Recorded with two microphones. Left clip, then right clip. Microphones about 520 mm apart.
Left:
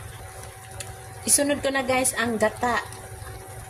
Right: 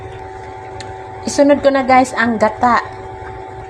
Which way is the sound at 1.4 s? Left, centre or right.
Left.